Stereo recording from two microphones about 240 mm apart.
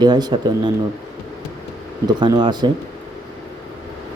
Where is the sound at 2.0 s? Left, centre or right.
Centre.